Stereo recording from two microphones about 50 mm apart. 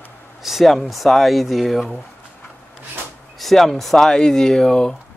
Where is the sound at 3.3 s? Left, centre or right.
Centre.